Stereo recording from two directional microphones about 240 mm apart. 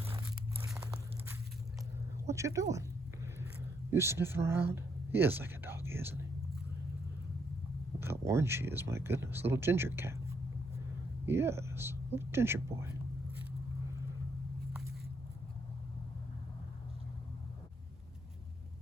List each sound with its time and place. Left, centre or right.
2.2 s speech: centre
3.9 s speech: centre
8.2 s speech: centre